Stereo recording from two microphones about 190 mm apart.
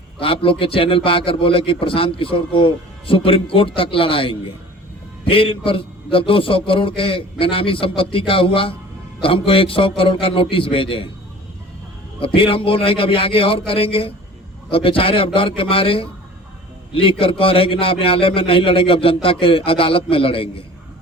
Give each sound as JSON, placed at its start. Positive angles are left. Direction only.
{"t": 0.2, "sound": "a man's voice", "side_deg": 30}
{"t": 12.2, "sound": "a man's voice", "side_deg": 30}